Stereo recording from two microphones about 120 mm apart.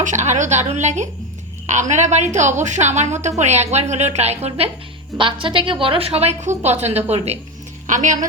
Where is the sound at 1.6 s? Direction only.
85° right; by 4.7 s 60° right (ahead or behind).